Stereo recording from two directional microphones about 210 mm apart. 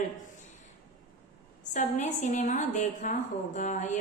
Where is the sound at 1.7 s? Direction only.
35° left (ahead or behind).